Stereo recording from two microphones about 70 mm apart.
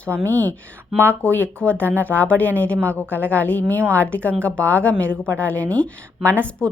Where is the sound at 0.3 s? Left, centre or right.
Left.